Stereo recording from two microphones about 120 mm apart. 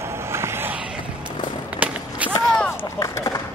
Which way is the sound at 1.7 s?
10° right (ahead or behind).